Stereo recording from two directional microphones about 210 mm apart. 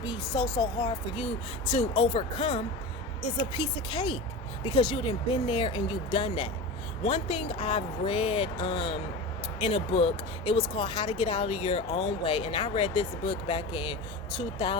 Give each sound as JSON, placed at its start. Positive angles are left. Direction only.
{"t": 0.0, "sound": "speech", "side_deg": 20}